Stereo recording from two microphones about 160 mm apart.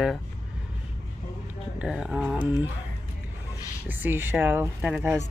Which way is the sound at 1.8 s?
5° right (ahead or behind).